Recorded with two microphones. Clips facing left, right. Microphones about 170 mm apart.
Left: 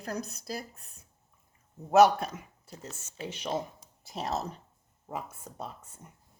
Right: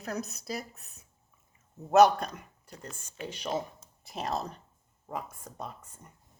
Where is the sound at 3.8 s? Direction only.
5° left (ahead or behind).